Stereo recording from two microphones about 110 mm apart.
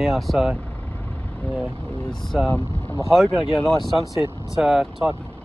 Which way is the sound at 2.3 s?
5° right (ahead or behind).